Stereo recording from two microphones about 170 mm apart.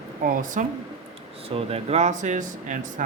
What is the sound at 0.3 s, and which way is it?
Speech, 50° right (ahead or behind).